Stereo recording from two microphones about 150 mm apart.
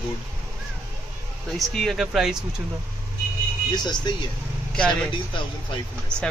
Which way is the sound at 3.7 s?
30° left (ahead or behind).